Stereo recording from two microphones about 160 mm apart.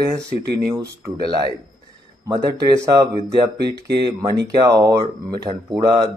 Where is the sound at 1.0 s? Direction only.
25° right (ahead or behind).